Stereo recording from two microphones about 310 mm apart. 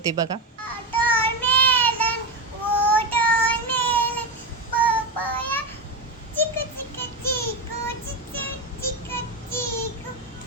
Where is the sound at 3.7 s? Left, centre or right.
Centre.